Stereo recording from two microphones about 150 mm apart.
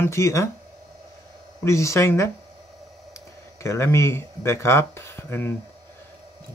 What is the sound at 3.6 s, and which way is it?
Speech, 20° left (ahead or behind).